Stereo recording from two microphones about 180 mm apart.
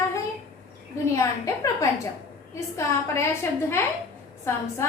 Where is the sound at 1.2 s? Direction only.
15° left (ahead or behind).